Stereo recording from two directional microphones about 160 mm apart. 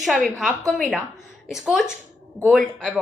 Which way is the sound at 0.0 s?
Centre (ahead or behind).